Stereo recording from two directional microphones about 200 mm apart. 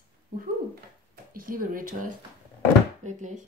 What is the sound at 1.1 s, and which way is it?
Speech, 45° right (ahead or behind).